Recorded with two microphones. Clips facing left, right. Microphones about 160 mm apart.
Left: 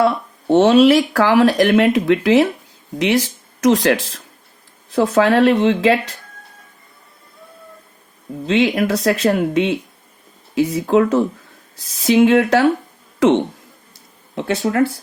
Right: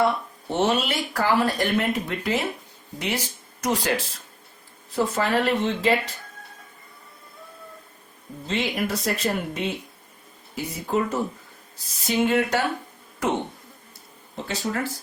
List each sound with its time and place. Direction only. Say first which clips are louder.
0.0 s speech: left 6 dB; 80° left
8.4 s speech: left 10 dB; 90° left
14.3 s speech: left 11 dB; 70° left (ahead or behind)